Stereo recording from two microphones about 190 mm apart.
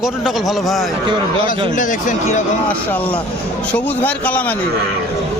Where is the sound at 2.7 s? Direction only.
10° left (ahead or behind).